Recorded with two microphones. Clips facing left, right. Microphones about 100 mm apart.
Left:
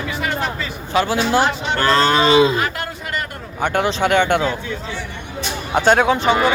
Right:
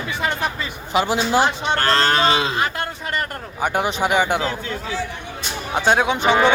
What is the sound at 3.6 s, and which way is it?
Speech, 10° right (ahead or behind).